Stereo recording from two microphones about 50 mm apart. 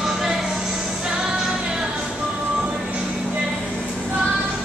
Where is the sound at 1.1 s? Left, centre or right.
Centre.